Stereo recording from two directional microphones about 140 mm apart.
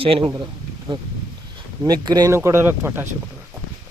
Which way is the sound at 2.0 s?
25° right (ahead or behind).